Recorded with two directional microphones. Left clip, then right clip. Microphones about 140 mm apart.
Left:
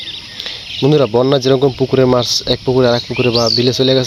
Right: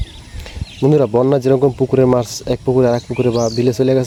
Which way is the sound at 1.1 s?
5° right (ahead or behind).